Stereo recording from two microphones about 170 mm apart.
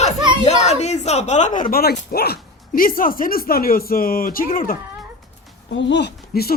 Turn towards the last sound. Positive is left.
turn(degrees=65)  # may be behind; listen again after turning